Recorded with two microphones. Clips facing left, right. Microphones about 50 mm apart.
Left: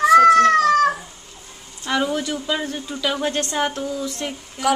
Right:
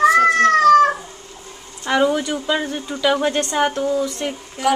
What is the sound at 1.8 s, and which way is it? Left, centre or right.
A woman's voice, centre.